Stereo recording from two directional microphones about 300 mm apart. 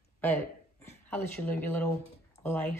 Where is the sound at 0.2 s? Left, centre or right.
Centre.